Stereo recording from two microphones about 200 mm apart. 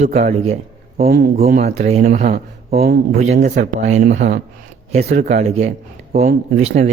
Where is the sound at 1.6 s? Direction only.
35° right (ahead or behind); by 3.2 s 50° right (ahead or behind).